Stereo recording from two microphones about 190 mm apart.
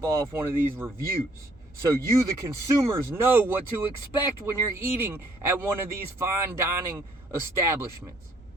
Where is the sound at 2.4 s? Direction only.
15° right (ahead or behind).